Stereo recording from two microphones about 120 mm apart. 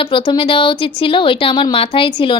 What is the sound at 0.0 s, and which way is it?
A woman's voice, 40° left (ahead or behind).